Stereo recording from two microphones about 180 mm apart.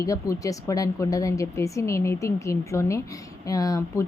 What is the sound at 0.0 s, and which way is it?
A woman's voice, 20° left (ahead or behind).